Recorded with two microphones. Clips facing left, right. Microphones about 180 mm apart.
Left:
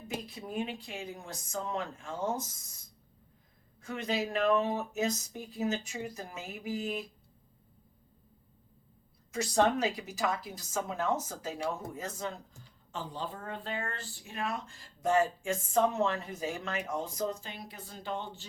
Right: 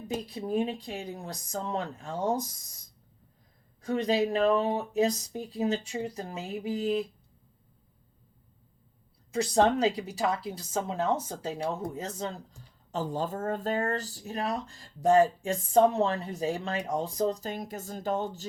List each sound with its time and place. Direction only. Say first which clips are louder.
0.1 s speech: right 8 dB; 35° right (ahead or behind)
3.8 s speech: right 7 dB; 35° right (ahead or behind)
9.3 s a woman's voice: right 4 dB; 30° right (ahead or behind)
12.9 s speech: right 8 dB; 45° right (ahead or behind)